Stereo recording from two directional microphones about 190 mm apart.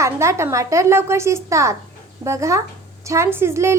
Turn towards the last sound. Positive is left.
turn(degrees=-15)  # may be behind; listen again after turning